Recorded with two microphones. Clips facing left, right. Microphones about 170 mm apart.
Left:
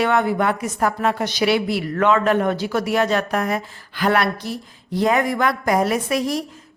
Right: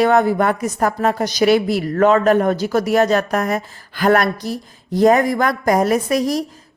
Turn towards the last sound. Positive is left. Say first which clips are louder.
# right 4 dB
turn(degrees=-40)  # may be behind; listen again after turning